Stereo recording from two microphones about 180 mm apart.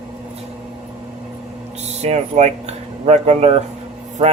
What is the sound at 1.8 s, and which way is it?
Speech, 35° right (ahead or behind).